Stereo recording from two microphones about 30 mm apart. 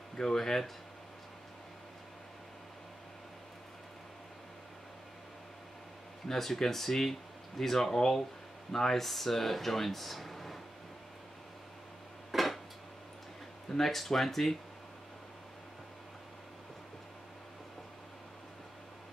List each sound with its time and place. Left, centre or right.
0.1 s speech: left
0.4 s speech: centre
6.2 s speech: centre
12.3 s dishes: centre
13.7 s speech: centre